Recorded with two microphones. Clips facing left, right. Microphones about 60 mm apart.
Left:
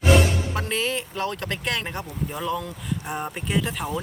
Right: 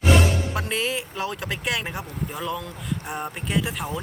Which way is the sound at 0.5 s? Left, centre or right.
Centre.